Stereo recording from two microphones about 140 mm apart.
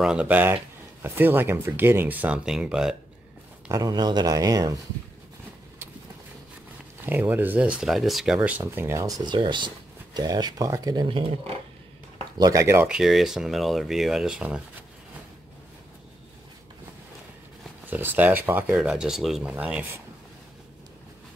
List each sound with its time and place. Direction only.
0.0 s speech: 5° right (ahead or behind)
3.6 s speech: 25° right (ahead or behind)
7.1 s speech: 15° right (ahead or behind)
8.5 s speech: 15° right (ahead or behind); by 11.5 s 40° right (ahead or behind)
12.4 s speech: 25° right (ahead or behind)
12.8 s speech: 5° right (ahead or behind)
17.8 s speech: 15° right (ahead or behind)